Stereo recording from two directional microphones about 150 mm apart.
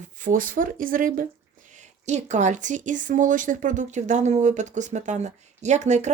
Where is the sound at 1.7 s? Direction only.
50° right (ahead or behind).